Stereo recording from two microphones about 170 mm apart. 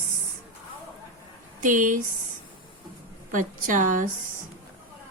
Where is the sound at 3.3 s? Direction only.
50° right (ahead or behind).